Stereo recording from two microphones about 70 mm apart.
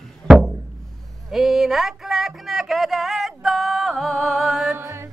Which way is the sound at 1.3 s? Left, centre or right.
Centre.